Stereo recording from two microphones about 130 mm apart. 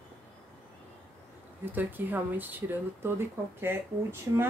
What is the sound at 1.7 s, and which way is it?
Speech, 15° right (ahead or behind).